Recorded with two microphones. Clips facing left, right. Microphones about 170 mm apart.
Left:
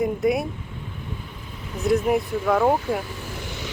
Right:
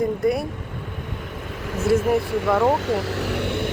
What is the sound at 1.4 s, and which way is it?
Vehicle, 90° right.